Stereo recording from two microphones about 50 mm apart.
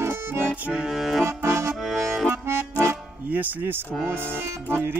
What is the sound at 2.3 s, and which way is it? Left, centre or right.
Accordion, right.